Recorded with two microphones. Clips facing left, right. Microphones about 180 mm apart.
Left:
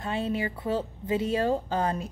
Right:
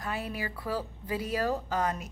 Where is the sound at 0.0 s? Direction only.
25° left (ahead or behind).